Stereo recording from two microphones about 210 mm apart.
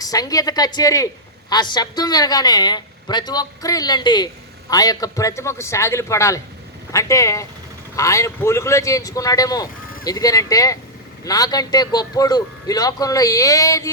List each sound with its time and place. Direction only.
0.0 s a man's voice: 15° left (ahead or behind)